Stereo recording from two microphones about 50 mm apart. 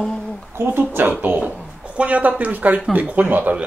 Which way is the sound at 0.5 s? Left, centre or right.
Right.